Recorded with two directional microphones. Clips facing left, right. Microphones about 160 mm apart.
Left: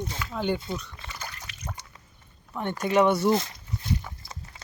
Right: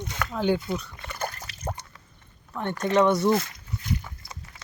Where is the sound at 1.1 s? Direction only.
50° right (ahead or behind).